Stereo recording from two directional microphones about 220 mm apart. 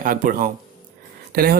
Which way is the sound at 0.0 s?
40° right (ahead or behind).